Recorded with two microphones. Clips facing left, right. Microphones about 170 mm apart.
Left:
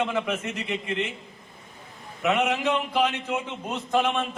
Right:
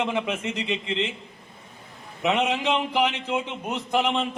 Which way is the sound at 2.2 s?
20° right (ahead or behind).